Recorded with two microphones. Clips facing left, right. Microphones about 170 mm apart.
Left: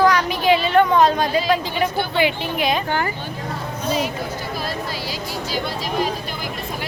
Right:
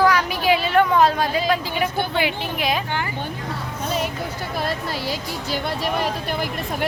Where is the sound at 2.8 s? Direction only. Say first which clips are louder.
Left 4 dB; 45° left (ahead or behind).